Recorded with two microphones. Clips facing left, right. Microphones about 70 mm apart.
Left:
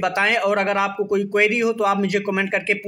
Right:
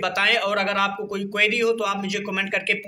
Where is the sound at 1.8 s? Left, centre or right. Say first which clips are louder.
Left 6 dB; left.